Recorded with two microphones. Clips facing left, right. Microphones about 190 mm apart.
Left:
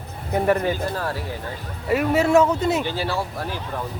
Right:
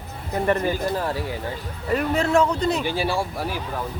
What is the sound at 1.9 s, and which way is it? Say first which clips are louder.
Speech: left 3 dB; 5° left (ahead or behind).